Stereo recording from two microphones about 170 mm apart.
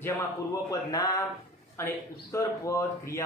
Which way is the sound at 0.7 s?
20° left (ahead or behind).